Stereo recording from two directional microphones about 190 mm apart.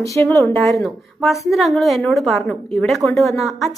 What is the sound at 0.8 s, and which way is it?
A woman's voice, centre (ahead or behind).